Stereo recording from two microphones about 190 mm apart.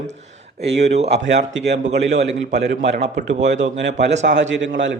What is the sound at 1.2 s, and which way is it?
Speech, 70° right (ahead or behind).